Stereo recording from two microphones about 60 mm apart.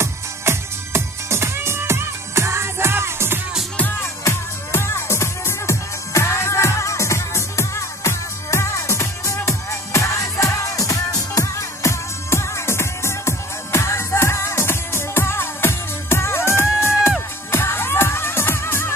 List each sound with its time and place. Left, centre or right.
0.0 s music: right
4.0 s music: left